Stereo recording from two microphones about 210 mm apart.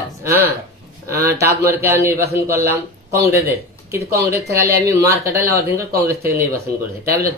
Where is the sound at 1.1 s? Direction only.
50° right (ahead or behind).